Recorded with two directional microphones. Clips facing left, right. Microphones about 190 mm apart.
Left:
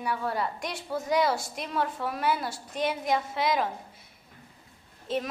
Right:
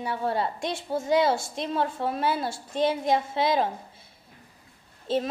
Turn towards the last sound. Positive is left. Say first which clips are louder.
# right 4 dB
turn(degrees=-30)  # may be behind; listen again after turning